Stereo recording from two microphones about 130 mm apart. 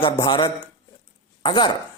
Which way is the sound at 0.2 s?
35° left (ahead or behind).